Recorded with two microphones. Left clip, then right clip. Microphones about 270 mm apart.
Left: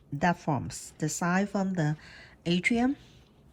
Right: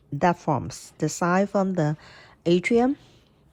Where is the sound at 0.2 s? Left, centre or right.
Right.